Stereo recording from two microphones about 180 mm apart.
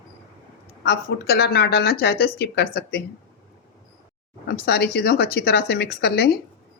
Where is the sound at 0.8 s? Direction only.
60° left (ahead or behind).